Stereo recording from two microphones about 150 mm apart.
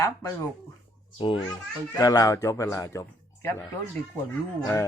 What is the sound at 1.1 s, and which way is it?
A child's voice, 35° left (ahead or behind).